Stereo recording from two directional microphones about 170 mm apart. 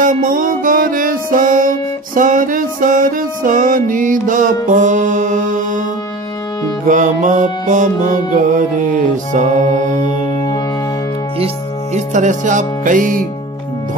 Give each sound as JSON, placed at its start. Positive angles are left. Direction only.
{"t": 0.0, "sound": "music", "side_deg": -55}
{"t": 6.9, "sound": "music", "side_deg": -50}
{"t": 11.3, "sound": "speech", "side_deg": -40}